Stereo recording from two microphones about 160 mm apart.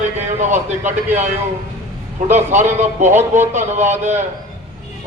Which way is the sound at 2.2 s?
45° right (ahead or behind).